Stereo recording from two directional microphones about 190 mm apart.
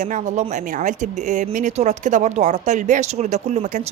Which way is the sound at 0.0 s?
40° right (ahead or behind).